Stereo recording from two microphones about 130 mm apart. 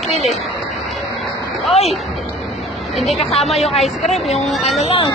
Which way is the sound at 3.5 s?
Centre (ahead or behind).